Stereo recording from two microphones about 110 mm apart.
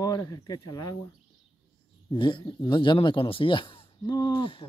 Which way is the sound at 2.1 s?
45° left (ahead or behind).